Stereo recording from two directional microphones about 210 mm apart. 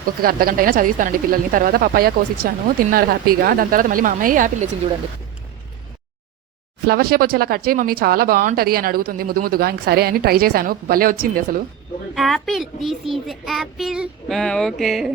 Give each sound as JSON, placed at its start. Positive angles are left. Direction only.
{"t": 0.2, "sound": "speech", "side_deg": -45}
{"t": 6.8, "sound": "speech", "side_deg": -45}
{"t": 12.1, "sound": "child singing", "side_deg": 0}